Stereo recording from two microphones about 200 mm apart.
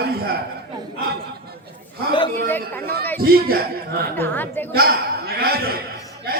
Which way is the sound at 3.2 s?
50° right (ahead or behind).